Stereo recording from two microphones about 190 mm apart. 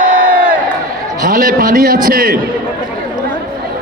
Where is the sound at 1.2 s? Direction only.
45° right (ahead or behind).